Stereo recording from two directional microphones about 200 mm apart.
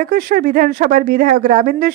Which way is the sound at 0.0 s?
45° right (ahead or behind).